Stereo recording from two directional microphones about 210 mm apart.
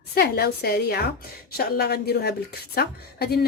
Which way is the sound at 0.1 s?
50° left (ahead or behind).